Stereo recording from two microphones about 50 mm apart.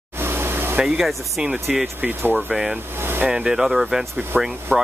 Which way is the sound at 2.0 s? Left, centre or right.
Right.